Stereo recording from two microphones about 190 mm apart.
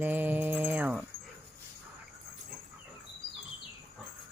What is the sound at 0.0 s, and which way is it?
Mantra, 10° right (ahead or behind).